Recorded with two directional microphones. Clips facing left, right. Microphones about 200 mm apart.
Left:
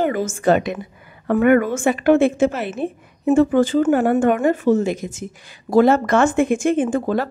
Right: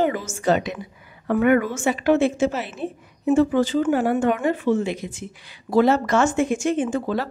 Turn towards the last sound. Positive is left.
turn(degrees=50)  # may be behind; listen again after turning